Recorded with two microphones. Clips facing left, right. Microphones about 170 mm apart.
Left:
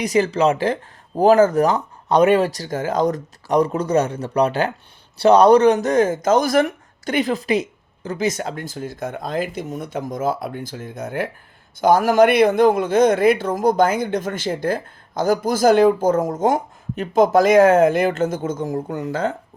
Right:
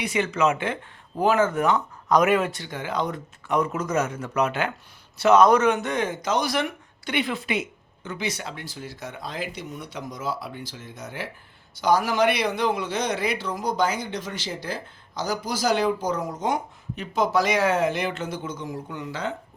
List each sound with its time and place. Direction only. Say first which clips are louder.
0.0 s a man's voice: left 6 dB; 35° left (ahead or behind)